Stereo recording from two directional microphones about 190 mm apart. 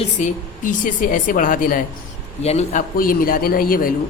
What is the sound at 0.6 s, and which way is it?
A man's voice, 45° left (ahead or behind).